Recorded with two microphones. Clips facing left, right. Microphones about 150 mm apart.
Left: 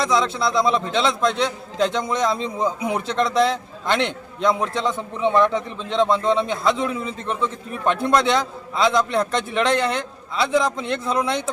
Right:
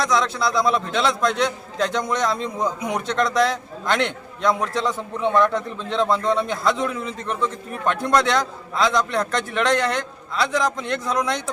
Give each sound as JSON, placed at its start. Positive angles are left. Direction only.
{"t": 0.0, "sound": "a man's voice", "side_deg": 0}
{"t": 10.8, "sound": "a man's voice", "side_deg": 25}